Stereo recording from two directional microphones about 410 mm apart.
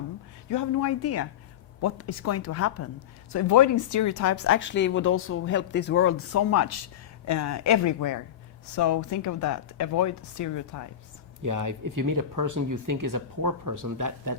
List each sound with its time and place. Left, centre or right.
0.5 s speech: left
11.4 s speech: right